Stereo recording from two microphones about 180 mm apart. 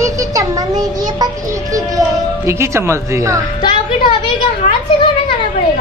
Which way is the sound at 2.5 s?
15° right (ahead or behind).